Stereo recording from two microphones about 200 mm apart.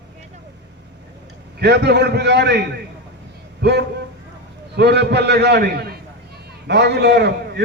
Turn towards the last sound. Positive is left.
turn(degrees=-55)  # may be behind; listen again after turning